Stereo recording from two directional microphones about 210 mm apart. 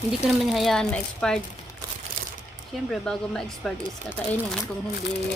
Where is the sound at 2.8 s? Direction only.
Centre (ahead or behind).